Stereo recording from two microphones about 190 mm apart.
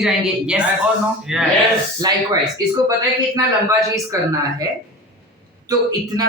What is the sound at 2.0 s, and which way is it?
Speech, 20° right (ahead or behind).